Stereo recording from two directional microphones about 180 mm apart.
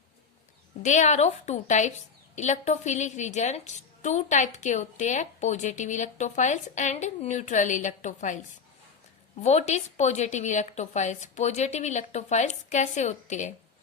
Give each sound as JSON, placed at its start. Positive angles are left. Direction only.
{"t": 0.8, "sound": "a woman's voice", "side_deg": 40}
{"t": 9.4, "sound": "a woman's voice", "side_deg": 40}